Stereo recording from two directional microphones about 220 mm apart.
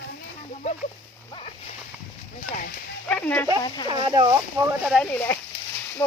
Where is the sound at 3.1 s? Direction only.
5° left (ahead or behind).